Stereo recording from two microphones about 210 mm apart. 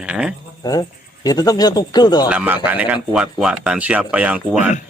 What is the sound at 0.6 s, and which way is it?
Speech, 20° left (ahead or behind).